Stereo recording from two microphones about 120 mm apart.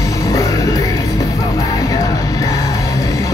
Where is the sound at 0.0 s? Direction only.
30° left (ahead or behind).